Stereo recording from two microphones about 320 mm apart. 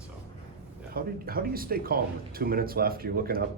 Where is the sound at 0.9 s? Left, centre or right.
Right.